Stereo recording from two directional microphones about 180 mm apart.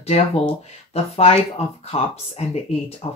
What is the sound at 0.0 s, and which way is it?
Speech, 35° left (ahead or behind).